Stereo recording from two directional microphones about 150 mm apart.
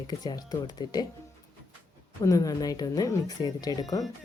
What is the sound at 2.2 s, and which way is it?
Speech, 25° left (ahead or behind).